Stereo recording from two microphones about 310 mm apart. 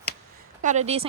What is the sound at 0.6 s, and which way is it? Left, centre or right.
Speech, right.